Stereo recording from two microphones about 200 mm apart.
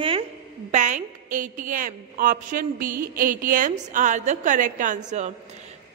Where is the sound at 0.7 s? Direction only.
40° right (ahead or behind).